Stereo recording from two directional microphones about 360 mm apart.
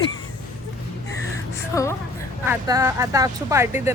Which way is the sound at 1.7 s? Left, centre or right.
Centre.